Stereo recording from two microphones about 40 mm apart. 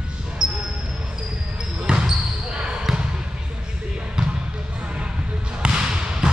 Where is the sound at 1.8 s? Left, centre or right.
Centre.